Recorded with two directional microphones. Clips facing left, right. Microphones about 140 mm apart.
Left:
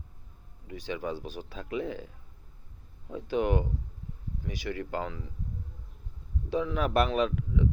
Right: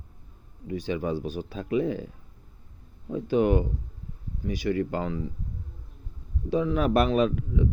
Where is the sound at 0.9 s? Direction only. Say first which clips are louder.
Right 4 dB; 45° right (ahead or behind).